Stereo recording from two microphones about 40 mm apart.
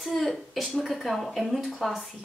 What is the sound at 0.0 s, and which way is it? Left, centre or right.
Speech, centre.